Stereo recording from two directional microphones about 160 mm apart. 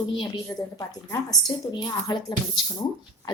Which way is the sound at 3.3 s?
25° left (ahead or behind).